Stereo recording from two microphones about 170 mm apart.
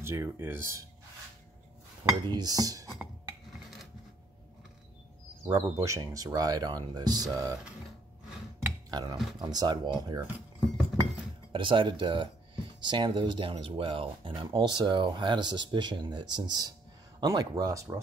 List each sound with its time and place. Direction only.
0.0 s speech: 15° right (ahead or behind)
2.0 s speech: 25° right (ahead or behind)
5.5 s speech: 20° right (ahead or behind)
8.9 s speech: 20° right (ahead or behind)
11.5 s speech: 30° right (ahead or behind)